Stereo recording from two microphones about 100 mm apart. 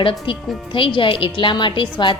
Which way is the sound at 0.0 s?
60° left (ahead or behind).